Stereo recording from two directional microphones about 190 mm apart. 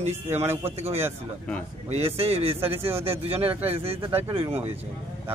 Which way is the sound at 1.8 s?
30° right (ahead or behind).